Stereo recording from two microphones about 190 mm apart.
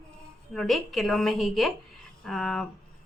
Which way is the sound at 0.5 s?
Centre (ahead or behind).